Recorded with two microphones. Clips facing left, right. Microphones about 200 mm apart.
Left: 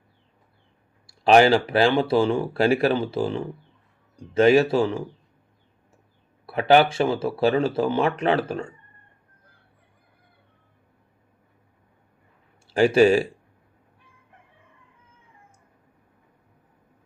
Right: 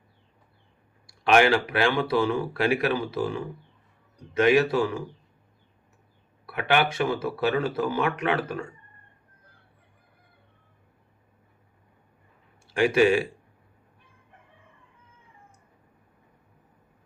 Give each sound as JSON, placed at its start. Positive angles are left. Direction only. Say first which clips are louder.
{"t": 1.0, "sound": "speech", "louder": "left 4 dB", "side_deg": 35}
{"t": 6.4, "sound": "speech", "louder": "left 7 dB", "side_deg": 30}
{"t": 12.7, "sound": "speech", "louder": "left 4 dB", "side_deg": 35}